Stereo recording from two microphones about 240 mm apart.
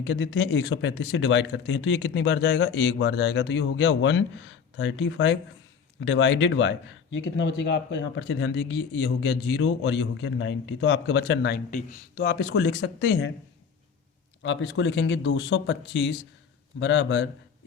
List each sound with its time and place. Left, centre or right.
0.0 s speech: left
14.4 s speech: left